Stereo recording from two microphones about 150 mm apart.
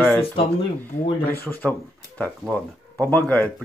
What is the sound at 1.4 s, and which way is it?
Speech, 10° left (ahead or behind).